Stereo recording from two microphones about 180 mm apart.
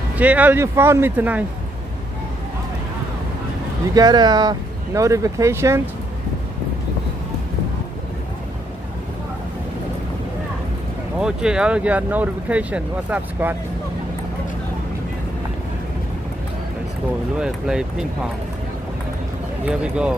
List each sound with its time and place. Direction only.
0.2 s speech: 10° right (ahead or behind)
3.9 s speech: 20° right (ahead or behind)
11.1 s speech: 5° right (ahead or behind)
17.4 s speech: 5° right (ahead or behind)
19.6 s speech: 5° right (ahead or behind)